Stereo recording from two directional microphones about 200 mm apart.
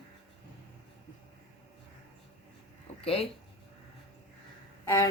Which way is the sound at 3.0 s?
30° left (ahead or behind).